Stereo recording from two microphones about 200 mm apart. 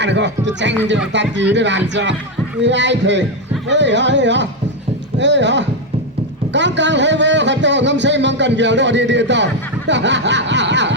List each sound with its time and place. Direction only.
0.0 s a man's voice: 60° right (ahead or behind)